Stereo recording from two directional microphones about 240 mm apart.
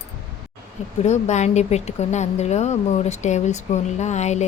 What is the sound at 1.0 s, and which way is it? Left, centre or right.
Speech, left.